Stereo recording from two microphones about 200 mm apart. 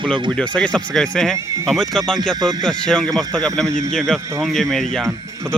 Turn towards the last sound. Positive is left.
turn(degrees=0)  # may be behind; listen again after turning